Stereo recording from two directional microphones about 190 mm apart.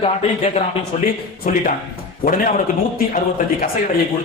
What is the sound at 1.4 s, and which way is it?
Speech, 45° left (ahead or behind).